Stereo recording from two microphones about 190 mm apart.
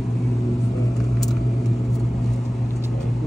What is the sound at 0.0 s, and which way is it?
Vehicle, centre (ahead or behind).